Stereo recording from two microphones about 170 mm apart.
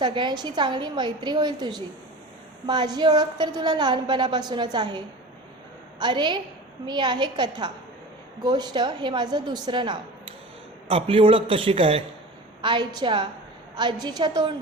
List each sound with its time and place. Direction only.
0.0 s a woman's voice: 25° right (ahead or behind)